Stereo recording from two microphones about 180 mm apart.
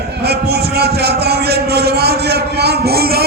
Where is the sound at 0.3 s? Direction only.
60° right (ahead or behind).